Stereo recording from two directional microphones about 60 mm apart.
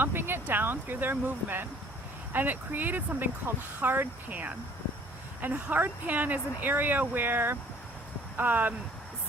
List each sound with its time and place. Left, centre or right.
0.0 s speech: right